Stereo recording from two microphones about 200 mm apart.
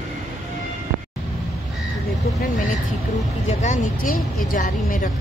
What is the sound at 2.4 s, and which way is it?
A woman's voice, 40° left (ahead or behind).